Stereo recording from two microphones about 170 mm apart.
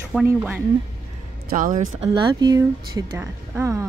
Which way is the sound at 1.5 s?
55° right (ahead or behind).